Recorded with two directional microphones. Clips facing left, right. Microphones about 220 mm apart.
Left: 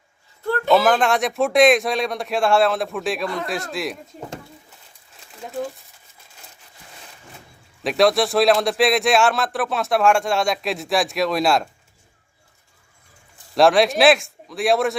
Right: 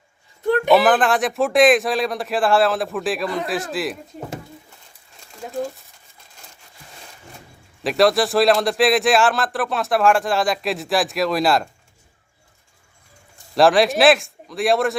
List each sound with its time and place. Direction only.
0.4 s a sound: 15° right (ahead or behind)
0.8 s speech: centre (ahead or behind)
5.2 s crumpling: centre (ahead or behind)
7.9 s speech: centre (ahead or behind)
13.6 s speech: centre (ahead or behind)